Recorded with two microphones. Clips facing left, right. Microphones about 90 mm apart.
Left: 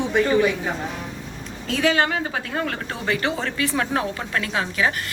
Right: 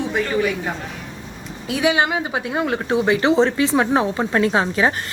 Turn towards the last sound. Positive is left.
turn(degrees=-30)  # may be behind; listen again after turning